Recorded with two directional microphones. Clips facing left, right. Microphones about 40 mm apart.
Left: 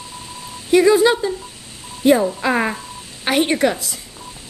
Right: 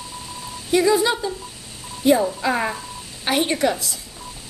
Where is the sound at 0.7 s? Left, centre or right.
Left.